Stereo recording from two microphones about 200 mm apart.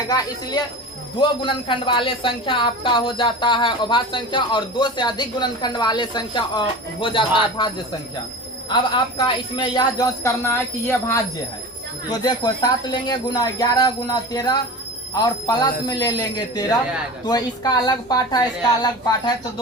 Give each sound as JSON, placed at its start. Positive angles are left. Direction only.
{"t": 1.2, "sound": "speech", "side_deg": 25}
{"t": 8.7, "sound": "speech", "side_deg": 25}
{"t": 12.2, "sound": "speech", "side_deg": 20}